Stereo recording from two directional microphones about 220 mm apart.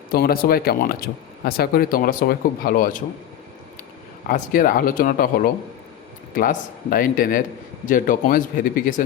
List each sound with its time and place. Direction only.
0.1 s speech: 45° left (ahead or behind)
4.3 s speech: 40° left (ahead or behind)
6.3 s speech: 40° left (ahead or behind)